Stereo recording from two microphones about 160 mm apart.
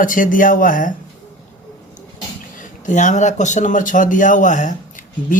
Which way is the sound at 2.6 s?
50° left (ahead or behind).